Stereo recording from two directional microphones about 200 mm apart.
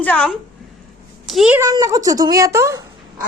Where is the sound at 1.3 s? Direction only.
5° right (ahead or behind).